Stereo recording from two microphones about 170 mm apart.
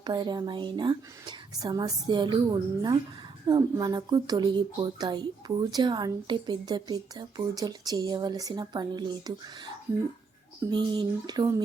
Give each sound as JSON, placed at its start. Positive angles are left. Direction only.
{"t": 0.0, "sound": "speech", "side_deg": -25}
{"t": 10.7, "sound": "speech", "side_deg": -25}